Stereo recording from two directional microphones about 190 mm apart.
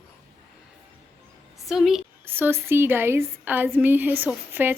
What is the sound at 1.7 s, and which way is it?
A woman's voice, centre (ahead or behind).